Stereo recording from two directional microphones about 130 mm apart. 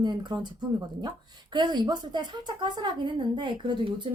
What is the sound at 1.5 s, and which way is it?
A woman's voice, 35° right (ahead or behind).